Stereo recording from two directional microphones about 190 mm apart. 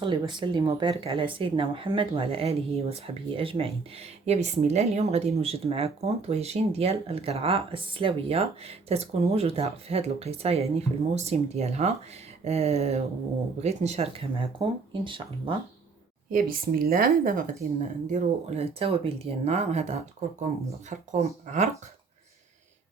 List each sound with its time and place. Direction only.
0.0 s speech: 25° right (ahead or behind)
16.3 s speech: 50° right (ahead or behind)
21.1 s speech: 40° right (ahead or behind)